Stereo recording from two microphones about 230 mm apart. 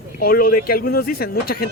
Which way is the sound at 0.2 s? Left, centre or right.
Left.